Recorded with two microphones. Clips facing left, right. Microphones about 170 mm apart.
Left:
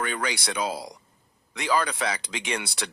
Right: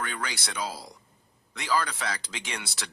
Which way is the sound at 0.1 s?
65° left (ahead or behind).